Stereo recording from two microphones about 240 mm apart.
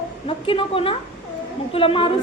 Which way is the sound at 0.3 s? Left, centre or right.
Left.